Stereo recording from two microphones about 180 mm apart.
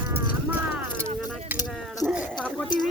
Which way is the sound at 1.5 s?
10° right (ahead or behind).